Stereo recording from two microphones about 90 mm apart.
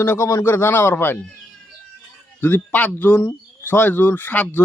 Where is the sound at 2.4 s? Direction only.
25° left (ahead or behind).